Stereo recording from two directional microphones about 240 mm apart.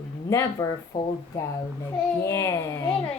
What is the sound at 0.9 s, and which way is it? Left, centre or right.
Speech, left.